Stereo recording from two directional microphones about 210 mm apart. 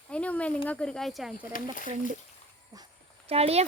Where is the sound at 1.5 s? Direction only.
40° left (ahead or behind).